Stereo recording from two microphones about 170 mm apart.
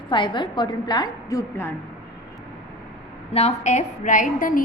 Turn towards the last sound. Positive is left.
turn(degrees=55)  # may be behind; listen again after turning